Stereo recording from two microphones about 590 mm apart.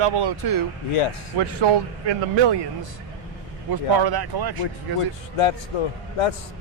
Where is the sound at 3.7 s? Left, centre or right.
Right.